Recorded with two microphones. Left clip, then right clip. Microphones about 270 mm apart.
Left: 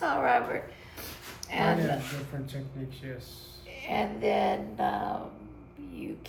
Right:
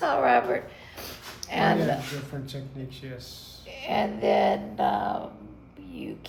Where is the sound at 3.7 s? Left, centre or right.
Right.